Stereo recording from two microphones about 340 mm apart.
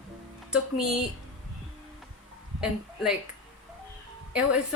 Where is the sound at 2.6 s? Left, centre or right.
Centre.